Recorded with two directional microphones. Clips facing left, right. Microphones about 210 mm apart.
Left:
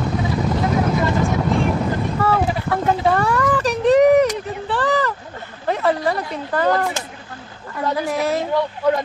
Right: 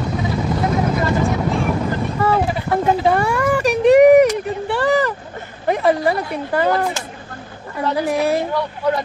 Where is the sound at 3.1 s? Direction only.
10° right (ahead or behind).